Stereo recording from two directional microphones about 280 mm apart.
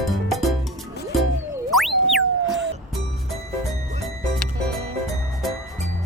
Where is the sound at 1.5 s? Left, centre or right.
Centre.